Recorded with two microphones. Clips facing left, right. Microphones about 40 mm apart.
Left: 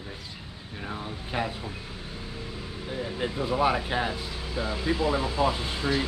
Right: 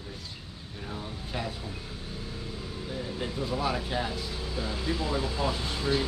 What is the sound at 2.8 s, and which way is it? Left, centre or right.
Speech, left.